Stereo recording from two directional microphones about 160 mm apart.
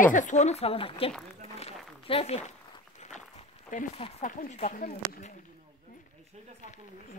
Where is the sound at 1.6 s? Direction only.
40° left (ahead or behind).